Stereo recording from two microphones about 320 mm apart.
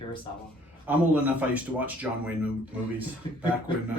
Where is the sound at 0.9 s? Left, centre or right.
Centre.